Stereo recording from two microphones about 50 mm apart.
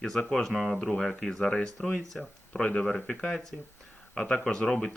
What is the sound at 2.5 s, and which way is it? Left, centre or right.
Speech, left.